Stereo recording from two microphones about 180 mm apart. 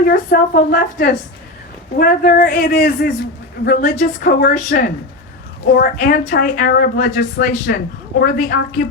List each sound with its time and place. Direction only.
0.0 s a woman's voice: 55° left (ahead or behind)